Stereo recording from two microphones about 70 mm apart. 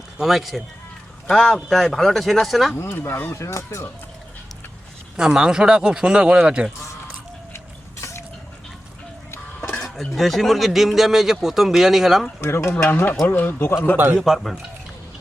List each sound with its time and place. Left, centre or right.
0.2 s speech: centre
1.3 s speech: centre
2.7 s speech: left
5.1 s speech: centre
9.7 s speech: centre
12.4 s speech: left
13.9 s a man's voice: right
14.2 s speech: centre